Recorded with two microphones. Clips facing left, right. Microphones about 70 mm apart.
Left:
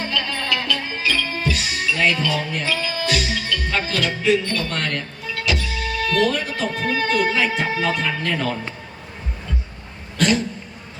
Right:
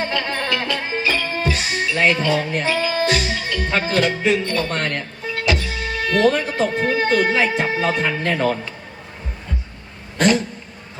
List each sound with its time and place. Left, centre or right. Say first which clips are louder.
0.0 s music: right 3 dB; right
10.2 s speech: right 2 dB; right